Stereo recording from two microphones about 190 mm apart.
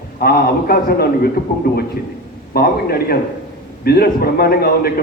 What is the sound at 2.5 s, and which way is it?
A man's voice, 50° left (ahead or behind).